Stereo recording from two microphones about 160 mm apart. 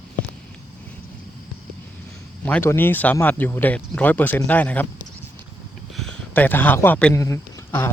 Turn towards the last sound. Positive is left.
turn(degrees=15)  # may be behind; listen again after turning